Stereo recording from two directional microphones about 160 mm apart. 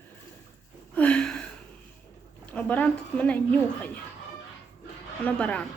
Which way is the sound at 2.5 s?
10° left (ahead or behind).